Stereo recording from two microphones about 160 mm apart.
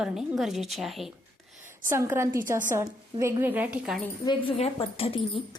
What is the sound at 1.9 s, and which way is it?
A woman's voice, 15° right (ahead or behind).